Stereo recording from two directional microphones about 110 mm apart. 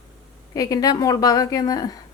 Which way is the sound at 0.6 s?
35° left (ahead or behind).